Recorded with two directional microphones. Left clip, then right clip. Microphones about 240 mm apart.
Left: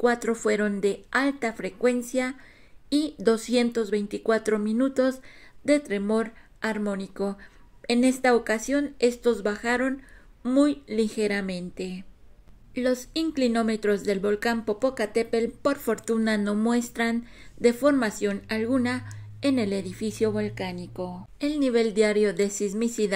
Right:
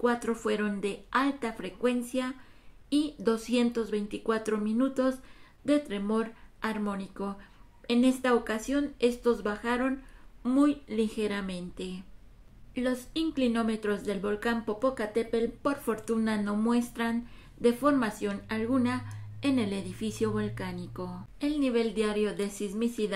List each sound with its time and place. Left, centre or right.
0.0 s speech: left
12.7 s speech: left
20.2 s speech: right
21.4 s speech: left